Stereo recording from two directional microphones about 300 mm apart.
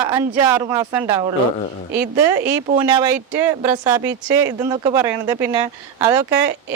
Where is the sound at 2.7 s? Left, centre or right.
Centre.